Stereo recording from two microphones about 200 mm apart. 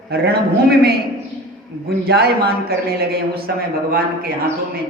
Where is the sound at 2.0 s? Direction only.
50° right (ahead or behind).